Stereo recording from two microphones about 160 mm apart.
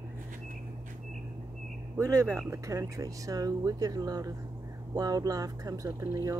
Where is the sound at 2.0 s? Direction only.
20° right (ahead or behind).